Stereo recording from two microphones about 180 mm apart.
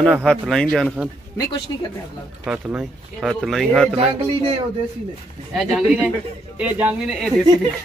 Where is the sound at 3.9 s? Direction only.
30° right (ahead or behind).